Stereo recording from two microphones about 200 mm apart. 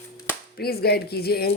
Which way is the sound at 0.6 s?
50° left (ahead or behind).